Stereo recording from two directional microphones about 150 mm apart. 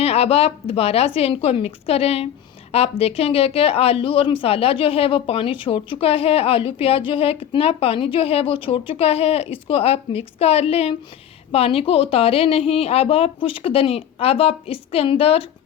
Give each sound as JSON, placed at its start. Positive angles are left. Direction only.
{"t": 0.0, "sound": "speech", "side_deg": 40}